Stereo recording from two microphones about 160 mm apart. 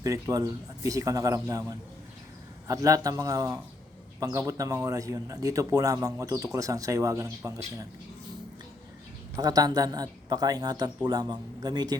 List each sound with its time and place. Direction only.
0.0 s speech: 20° right (ahead or behind)
9.3 s speech: 25° right (ahead or behind)